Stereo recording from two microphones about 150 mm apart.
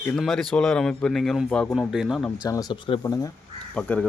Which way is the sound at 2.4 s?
25° left (ahead or behind).